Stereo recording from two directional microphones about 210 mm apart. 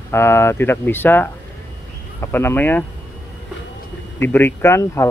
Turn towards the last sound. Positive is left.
turn(degrees=10)  # may be behind; listen again after turning